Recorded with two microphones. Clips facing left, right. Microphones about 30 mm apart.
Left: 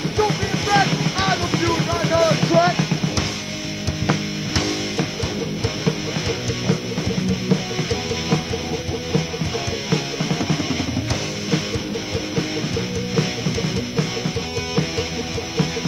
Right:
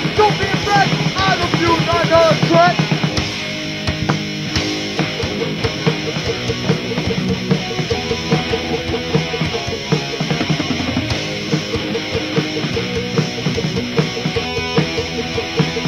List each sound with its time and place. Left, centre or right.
0.2 s music: right
0.7 s music: centre
4.1 s music: right
7.4 s music: right